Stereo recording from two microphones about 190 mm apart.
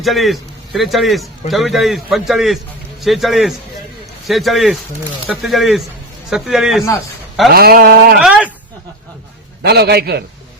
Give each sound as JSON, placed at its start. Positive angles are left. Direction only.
{"t": 0.0, "sound": "a man's voice", "side_deg": 0}
{"t": 7.5, "sound": "a sound", "side_deg": -55}
{"t": 8.2, "sound": "speech", "side_deg": -5}
{"t": 9.6, "sound": "a man's voice", "side_deg": -60}